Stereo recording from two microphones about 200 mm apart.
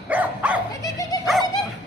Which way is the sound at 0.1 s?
5° right (ahead or behind).